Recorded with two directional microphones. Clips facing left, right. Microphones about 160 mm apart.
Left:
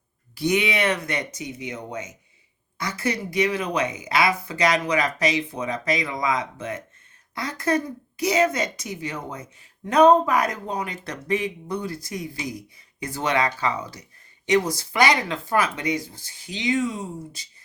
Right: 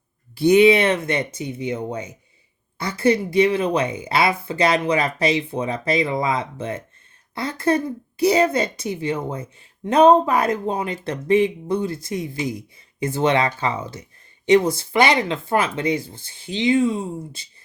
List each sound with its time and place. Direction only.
0.3 s speech: 30° right (ahead or behind)